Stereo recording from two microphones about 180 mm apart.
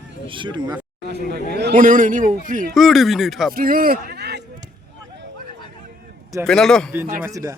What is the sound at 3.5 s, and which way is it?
Speech, 50° right (ahead or behind).